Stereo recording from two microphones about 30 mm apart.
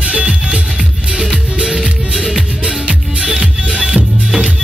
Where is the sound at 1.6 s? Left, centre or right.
Centre.